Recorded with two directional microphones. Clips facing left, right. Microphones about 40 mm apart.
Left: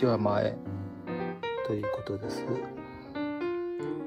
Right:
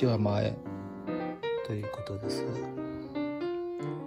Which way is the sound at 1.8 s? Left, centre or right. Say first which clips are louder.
Left 5 dB; left.